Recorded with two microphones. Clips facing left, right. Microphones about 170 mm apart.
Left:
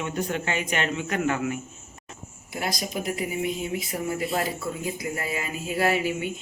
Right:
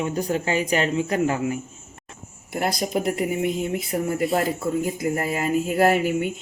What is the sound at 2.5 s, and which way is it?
Speech, 55° right (ahead or behind).